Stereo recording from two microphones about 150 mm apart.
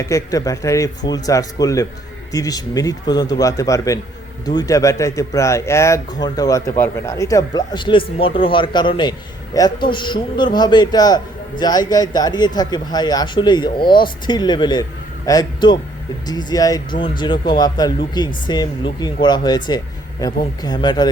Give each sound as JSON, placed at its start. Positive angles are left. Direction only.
{"t": 0.0, "sound": "a man's voice", "side_deg": 20}